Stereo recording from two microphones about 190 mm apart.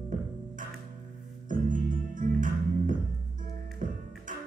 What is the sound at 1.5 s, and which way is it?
Music, 45° right (ahead or behind).